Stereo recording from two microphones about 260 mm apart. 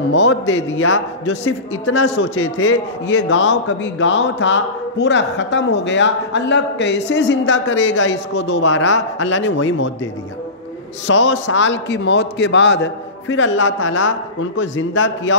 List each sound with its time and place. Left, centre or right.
0.1 s a man's voice: left
11.1 s a man's voice: left